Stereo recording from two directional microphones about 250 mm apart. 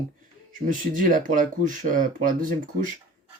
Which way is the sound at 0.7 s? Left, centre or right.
Right.